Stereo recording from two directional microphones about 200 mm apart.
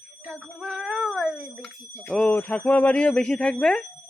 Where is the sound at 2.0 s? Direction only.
5° left (ahead or behind).